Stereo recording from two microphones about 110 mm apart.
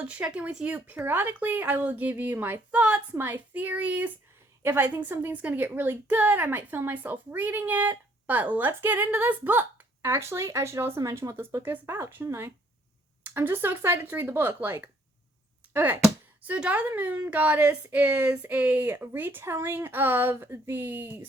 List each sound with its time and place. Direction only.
0.0 s a woman's voice: 10° right (ahead or behind)